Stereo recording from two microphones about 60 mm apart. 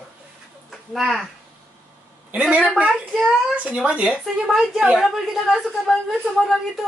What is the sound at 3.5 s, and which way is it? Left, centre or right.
Speech, right.